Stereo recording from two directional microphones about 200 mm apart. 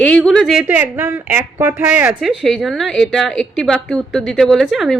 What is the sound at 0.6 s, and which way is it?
A woman's voice, 10° right (ahead or behind).